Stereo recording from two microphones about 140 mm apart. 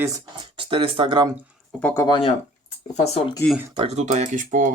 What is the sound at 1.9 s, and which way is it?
Speech, 35° left (ahead or behind).